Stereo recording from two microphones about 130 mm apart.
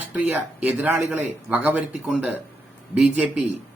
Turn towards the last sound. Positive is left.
turn(degrees=-10)  # may be behind; listen again after turning